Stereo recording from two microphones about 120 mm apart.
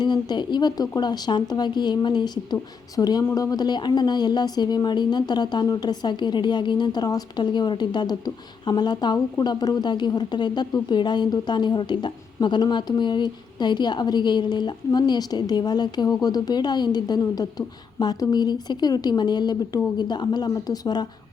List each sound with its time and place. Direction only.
0.0 s a woman's voice: 40° left (ahead or behind)